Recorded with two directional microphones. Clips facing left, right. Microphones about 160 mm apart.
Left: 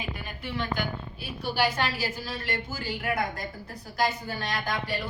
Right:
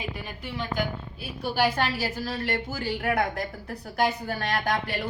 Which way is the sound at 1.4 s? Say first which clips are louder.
Right 2 dB; 55° right (ahead or behind).